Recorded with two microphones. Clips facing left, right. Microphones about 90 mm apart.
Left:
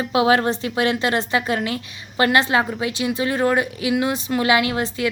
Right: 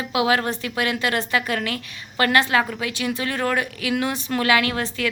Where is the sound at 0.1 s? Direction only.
30° left (ahead or behind).